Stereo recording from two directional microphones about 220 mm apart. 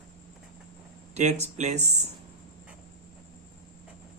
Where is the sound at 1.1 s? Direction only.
30° right (ahead or behind).